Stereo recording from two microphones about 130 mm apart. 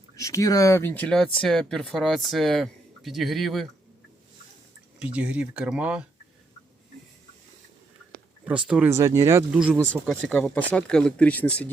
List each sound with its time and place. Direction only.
0.2 s speech: 25° left (ahead or behind); by 3.7 s centre (ahead or behind)
4.9 s speech: 10° right (ahead or behind)
8.4 s speech: 10° right (ahead or behind)
8.9 s speech: 25° right (ahead or behind)
9.5 s speech: 5° right (ahead or behind)
9.8 s speech: 10° left (ahead or behind)